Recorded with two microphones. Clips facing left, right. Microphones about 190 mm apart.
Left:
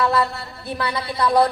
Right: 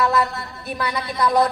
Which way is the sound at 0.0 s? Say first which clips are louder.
Even; 30° left (ahead or behind).